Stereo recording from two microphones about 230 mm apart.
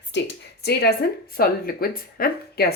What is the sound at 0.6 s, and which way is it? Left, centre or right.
Speech, left.